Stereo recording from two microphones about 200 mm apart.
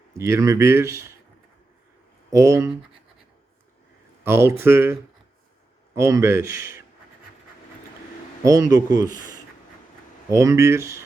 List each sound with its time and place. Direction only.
0.2 s speech: 15° right (ahead or behind)
2.3 s speech: 15° right (ahead or behind)
4.2 s speech: 10° right (ahead or behind)
8.4 s speech: 15° right (ahead or behind)
10.2 s speech: 15° right (ahead or behind)